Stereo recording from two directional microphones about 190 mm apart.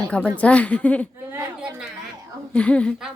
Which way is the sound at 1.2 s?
15° right (ahead or behind).